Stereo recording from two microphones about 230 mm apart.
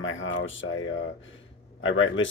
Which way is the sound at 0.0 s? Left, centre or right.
Left.